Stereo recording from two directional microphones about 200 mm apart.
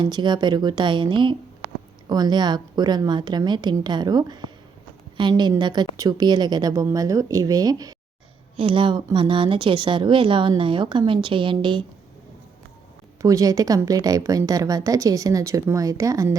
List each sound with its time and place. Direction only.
0.0 s speech: 20° right (ahead or behind)
13.2 s a woman's voice: 15° right (ahead or behind)